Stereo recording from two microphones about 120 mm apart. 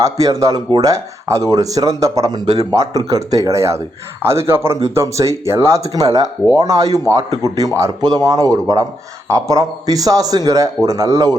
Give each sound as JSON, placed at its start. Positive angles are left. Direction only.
{"t": 0.0, "sound": "speech", "side_deg": -30}